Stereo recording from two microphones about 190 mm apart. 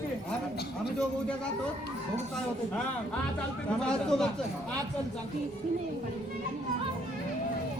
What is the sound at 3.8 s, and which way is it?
Speech, 5° left (ahead or behind).